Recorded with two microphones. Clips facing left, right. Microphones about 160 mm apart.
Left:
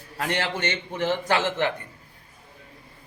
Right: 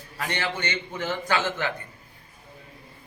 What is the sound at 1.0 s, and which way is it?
Speech, 30° left (ahead or behind).